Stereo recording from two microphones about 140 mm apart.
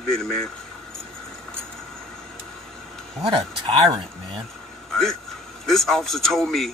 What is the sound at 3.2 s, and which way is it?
Speech, 35° right (ahead or behind).